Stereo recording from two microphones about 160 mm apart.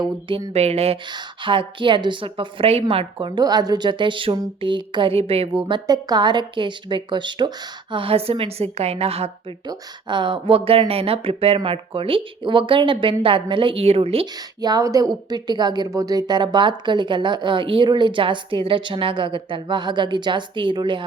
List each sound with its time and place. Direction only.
0.0 s a woman's voice: 30° right (ahead or behind)
9.6 s a woman's voice: 30° right (ahead or behind)
14.6 s a woman's voice: 25° right (ahead or behind)